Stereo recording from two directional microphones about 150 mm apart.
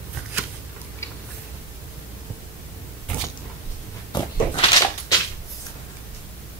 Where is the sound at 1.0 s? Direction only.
20° left (ahead or behind).